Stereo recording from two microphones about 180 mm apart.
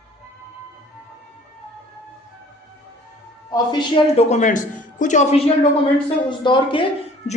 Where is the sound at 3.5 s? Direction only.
25° left (ahead or behind).